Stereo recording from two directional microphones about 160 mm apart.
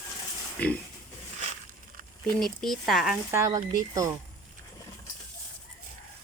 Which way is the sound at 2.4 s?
Centre (ahead or behind).